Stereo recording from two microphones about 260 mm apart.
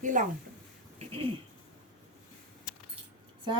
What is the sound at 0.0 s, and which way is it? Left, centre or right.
Speech, right.